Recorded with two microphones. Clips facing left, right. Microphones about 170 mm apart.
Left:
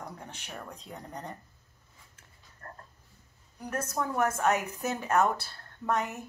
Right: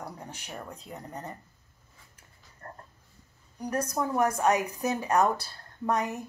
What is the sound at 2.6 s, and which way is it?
Frog, 20° right (ahead or behind).